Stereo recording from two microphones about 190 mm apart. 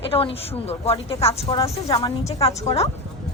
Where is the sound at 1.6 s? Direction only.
20° left (ahead or behind).